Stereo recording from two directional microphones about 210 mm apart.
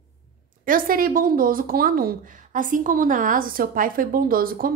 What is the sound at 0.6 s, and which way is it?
A woman's voice, 40° right (ahead or behind).